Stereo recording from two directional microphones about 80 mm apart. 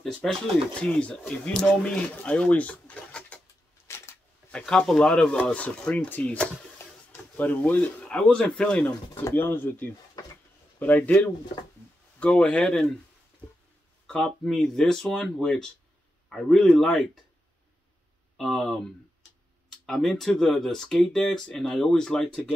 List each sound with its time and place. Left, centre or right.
0.0 s speech: centre
3.8 s a sound: left
4.5 s speech: centre
9.3 s speech: left
12.2 s speech: centre
14.0 s speech: centre
18.4 s speech: centre
19.9 s speech: centre